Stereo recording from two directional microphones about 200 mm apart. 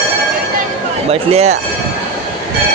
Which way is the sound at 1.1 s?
30° right (ahead or behind).